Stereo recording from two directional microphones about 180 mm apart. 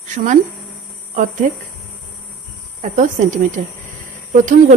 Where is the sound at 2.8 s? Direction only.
45° right (ahead or behind).